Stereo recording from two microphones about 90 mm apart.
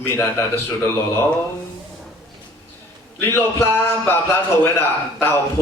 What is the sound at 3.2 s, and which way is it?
Speech, 25° left (ahead or behind).